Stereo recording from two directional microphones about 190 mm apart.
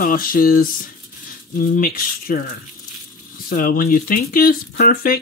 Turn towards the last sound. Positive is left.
turn(degrees=45)  # may be behind; listen again after turning